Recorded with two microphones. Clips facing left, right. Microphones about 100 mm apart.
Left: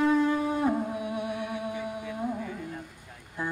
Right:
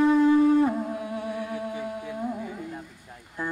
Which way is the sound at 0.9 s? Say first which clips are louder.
Right 1 dB; 15° left (ahead or behind).